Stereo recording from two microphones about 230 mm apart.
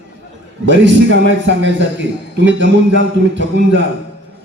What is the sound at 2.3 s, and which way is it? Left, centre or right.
A man's voice, right.